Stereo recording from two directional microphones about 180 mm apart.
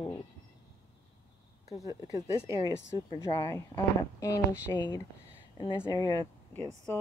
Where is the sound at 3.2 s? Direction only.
15° left (ahead or behind).